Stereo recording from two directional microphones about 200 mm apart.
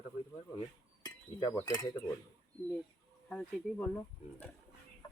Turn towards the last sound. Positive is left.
turn(degrees=10)  # may be behind; listen again after turning